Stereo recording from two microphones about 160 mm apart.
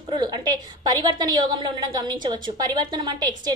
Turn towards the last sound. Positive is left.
turn(degrees=-25)  # may be behind; listen again after turning